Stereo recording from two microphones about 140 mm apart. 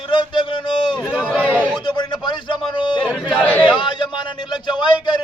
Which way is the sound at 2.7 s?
35° left (ahead or behind).